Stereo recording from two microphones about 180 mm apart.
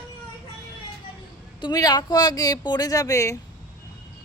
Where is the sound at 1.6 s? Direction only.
20° left (ahead or behind).